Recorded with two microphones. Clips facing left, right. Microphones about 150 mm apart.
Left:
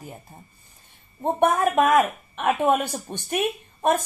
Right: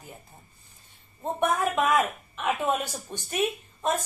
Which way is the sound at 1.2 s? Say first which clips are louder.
Left 5 dB; 55° left (ahead or behind).